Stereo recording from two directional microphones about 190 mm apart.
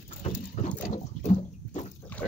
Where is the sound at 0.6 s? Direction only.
40° left (ahead or behind).